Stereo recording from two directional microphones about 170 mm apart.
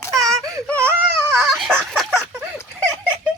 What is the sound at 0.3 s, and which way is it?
Wail, 20° right (ahead or behind).